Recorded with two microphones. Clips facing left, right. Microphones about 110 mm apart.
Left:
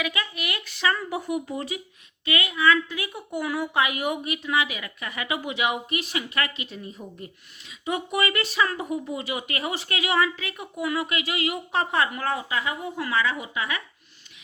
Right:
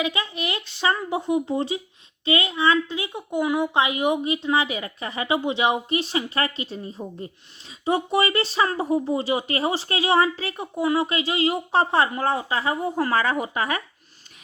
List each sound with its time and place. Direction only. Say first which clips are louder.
0.0 s a woman's voice: right 4 dB; 25° right (ahead or behind); by 13.8 s 45° right (ahead or behind)